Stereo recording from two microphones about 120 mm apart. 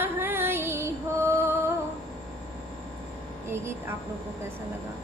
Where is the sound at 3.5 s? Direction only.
20° right (ahead or behind).